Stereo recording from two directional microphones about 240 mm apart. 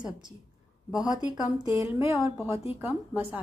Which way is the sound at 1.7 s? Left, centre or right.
Centre.